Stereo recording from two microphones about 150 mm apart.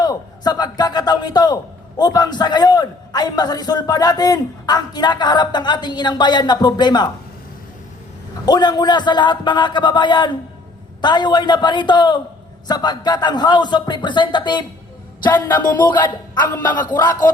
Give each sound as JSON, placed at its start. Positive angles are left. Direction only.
{"t": 0.0, "sound": "a man's voice", "side_deg": 25}
{"t": 8.4, "sound": "a man's voice", "side_deg": 25}
{"t": 15.3, "sound": "a sound", "side_deg": 10}
{"t": 15.7, "sound": "a man's voice", "side_deg": 30}